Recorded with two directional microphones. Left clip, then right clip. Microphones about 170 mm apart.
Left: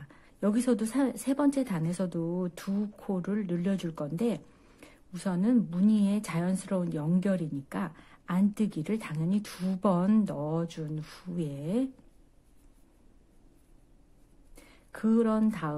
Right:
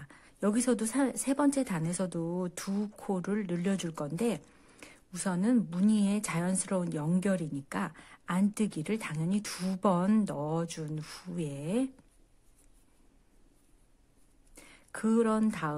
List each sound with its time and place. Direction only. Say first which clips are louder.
0.0 s a woman's voice: left 1 dB; 15° right (ahead or behind)
14.5 s speech: right 2 dB; 15° right (ahead or behind)